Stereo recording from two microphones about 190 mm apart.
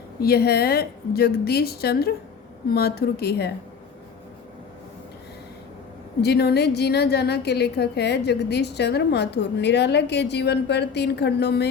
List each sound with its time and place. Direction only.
0.2 s a woman's voice: 55° left (ahead or behind)
6.2 s a woman's voice: 60° left (ahead or behind)